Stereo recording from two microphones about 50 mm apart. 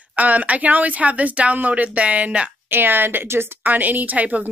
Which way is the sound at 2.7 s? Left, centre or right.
Right.